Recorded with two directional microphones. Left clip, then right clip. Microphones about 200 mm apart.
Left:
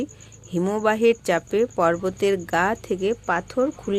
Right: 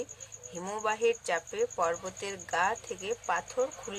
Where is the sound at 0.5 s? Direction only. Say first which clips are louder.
Left 11 dB; 35° left (ahead or behind).